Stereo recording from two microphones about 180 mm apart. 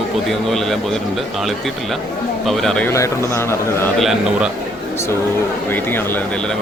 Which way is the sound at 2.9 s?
15° left (ahead or behind).